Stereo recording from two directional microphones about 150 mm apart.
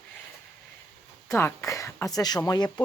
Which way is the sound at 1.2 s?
15° left (ahead or behind).